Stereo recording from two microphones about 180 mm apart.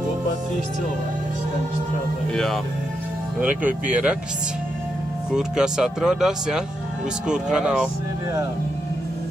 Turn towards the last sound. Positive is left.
turn(degrees=-5)  # may be behind; listen again after turning